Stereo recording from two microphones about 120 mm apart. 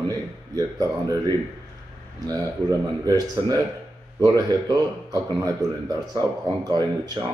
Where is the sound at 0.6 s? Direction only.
30° right (ahead or behind).